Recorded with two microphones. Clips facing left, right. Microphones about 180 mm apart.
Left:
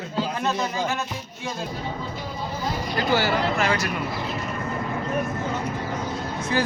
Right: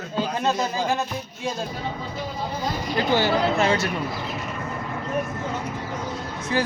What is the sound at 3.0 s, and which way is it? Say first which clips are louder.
Speech: right 2 dB; 20° right (ahead or behind).